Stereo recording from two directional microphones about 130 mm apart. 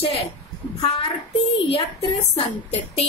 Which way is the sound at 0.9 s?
45° left (ahead or behind).